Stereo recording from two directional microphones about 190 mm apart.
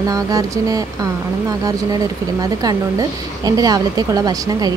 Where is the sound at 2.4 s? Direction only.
20° right (ahead or behind).